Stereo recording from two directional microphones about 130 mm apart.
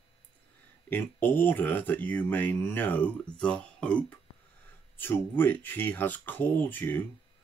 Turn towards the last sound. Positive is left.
turn(degrees=15)  # may be behind; listen again after turning